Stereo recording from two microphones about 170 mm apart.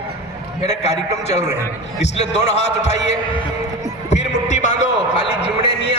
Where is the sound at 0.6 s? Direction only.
40° left (ahead or behind).